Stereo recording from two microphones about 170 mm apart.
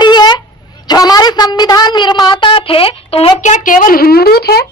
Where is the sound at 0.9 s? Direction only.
25° left (ahead or behind); by 4.6 s 65° left (ahead or behind).